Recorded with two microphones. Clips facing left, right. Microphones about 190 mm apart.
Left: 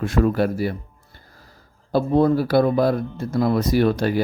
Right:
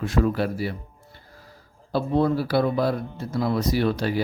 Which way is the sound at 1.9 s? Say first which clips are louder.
Left 4 dB; 45° left (ahead or behind).